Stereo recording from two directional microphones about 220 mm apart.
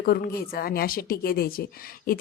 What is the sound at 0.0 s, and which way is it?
A woman's voice, 40° left (ahead or behind).